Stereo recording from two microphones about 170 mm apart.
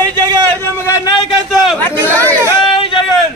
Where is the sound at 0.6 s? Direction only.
20° left (ahead or behind).